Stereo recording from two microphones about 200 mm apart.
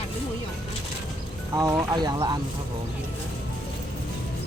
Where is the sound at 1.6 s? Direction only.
20° right (ahead or behind).